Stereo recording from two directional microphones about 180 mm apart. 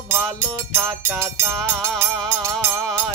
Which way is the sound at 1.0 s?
15° right (ahead or behind).